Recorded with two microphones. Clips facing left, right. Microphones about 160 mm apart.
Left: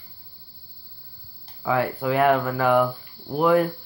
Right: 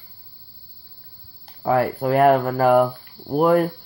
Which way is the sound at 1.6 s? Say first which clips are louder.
Right 4 dB; 40° right (ahead or behind).